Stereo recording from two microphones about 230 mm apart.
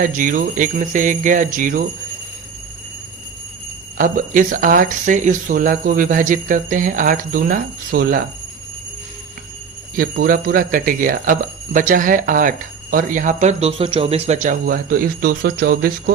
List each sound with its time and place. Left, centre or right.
0.0 s speech: right
3.9 s speech: right
9.9 s speech: right